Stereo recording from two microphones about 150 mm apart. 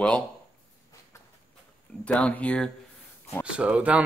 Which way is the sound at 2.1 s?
10° left (ahead or behind).